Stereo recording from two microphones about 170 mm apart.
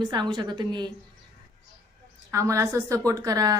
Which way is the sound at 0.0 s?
25° right (ahead or behind).